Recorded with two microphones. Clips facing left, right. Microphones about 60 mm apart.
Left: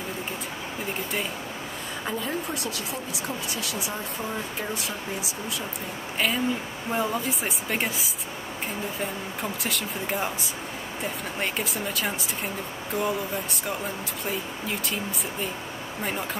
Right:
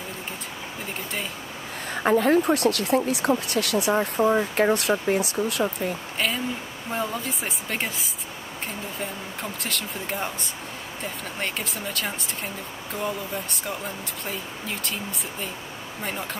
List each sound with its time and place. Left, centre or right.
2.0 s speech: right
4.2 s speech: right
4.6 s speech: right
6.1 s a woman's voice: centre
9.4 s a woman's voice: centre
16.0 s a woman's voice: centre